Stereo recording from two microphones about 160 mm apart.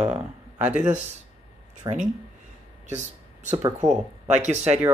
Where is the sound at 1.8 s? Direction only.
25° right (ahead or behind).